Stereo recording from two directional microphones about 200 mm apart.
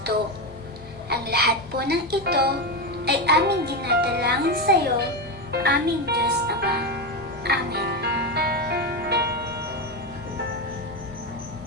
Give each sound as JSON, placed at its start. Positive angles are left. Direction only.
{"t": 1.1, "sound": "a child's voice", "side_deg": -50}
{"t": 7.4, "sound": "music", "side_deg": -55}